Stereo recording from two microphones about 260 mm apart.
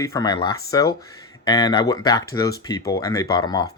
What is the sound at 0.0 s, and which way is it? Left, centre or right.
Speech, centre.